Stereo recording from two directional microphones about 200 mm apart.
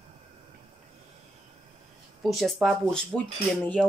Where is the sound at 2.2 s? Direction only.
Centre (ahead or behind).